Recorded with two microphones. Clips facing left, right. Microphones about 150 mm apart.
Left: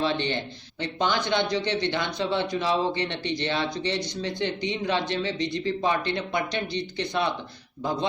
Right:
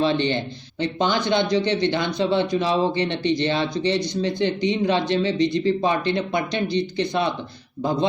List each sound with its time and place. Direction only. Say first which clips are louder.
0.0 s speech: right 5 dB; 25° right (ahead or behind)